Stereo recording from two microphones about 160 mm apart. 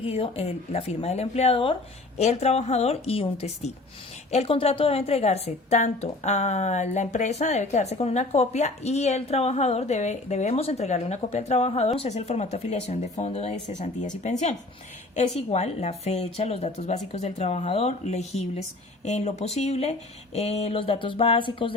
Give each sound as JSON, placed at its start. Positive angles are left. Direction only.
{"t": 0.0, "sound": "a woman's voice", "side_deg": 35}